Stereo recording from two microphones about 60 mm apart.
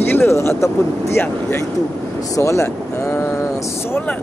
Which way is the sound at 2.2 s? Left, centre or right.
Left.